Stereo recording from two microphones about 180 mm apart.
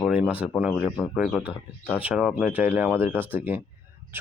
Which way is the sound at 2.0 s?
5° right (ahead or behind).